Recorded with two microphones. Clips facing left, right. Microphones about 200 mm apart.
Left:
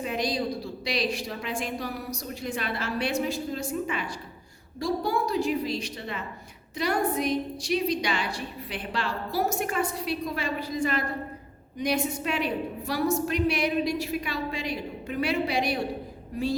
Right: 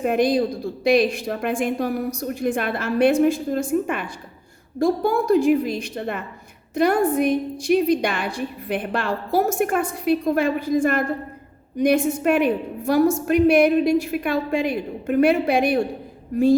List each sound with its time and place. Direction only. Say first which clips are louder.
0.0 s a woman's voice: right 9 dB; 55° right (ahead or behind)